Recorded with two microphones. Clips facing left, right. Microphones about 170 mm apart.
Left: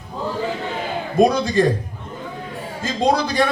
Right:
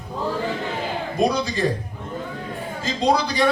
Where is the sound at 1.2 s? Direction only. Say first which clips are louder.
Left 6 dB; 50° left (ahead or behind).